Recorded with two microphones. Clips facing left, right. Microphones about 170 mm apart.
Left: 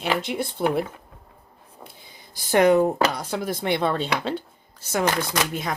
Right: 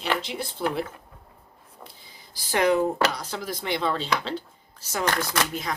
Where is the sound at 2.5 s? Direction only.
50° left (ahead or behind).